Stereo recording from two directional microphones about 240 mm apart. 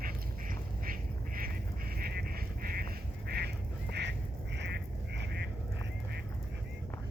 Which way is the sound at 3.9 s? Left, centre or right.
Right.